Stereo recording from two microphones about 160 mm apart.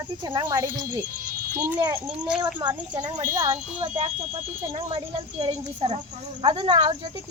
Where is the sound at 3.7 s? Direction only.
45° right (ahead or behind).